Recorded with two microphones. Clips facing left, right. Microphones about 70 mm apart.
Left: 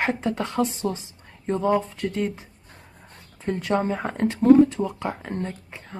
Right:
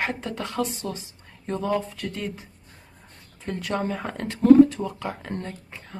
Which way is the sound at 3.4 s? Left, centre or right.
Left.